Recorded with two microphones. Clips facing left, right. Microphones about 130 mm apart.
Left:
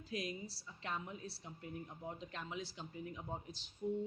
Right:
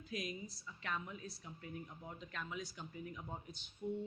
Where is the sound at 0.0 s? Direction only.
30° left (ahead or behind).